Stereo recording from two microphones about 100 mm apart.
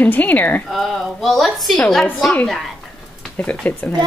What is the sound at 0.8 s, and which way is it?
Speech, centre (ahead or behind).